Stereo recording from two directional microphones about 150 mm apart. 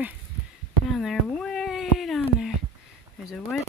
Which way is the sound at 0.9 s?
Centre (ahead or behind).